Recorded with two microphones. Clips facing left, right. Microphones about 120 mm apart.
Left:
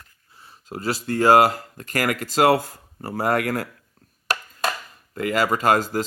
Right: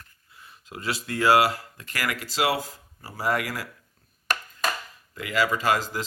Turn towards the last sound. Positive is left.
turn(degrees=45)  # may be behind; listen again after turning